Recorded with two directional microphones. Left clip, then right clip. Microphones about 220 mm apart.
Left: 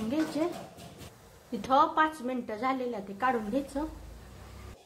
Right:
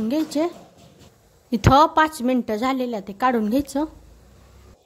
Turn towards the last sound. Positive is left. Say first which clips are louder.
# right 9 dB
turn(degrees=-50)  # may be behind; listen again after turning